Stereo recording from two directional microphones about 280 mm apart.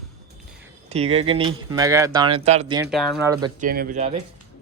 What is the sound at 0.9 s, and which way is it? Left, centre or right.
Speech, right.